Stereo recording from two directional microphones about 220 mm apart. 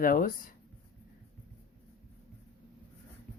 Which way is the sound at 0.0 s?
40° left (ahead or behind).